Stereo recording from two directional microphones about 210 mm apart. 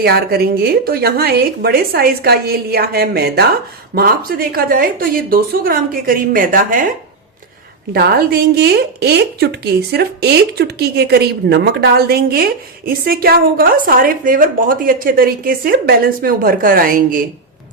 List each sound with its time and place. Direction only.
0.0 s a woman's voice: 50° right (ahead or behind)
7.9 s a woman's voice: 50° right (ahead or behind)